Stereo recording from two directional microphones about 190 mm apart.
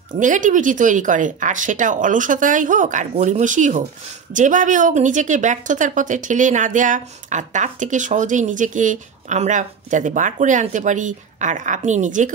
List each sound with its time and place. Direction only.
0.1 s speech: 40° right (ahead or behind)